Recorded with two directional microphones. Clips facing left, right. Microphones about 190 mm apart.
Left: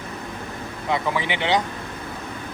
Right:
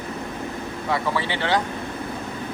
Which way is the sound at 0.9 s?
15° left (ahead or behind).